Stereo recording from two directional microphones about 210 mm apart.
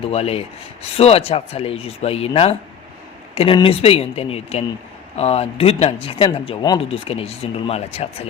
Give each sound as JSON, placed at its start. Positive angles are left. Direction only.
{"t": 0.1, "sound": "speech", "side_deg": 30}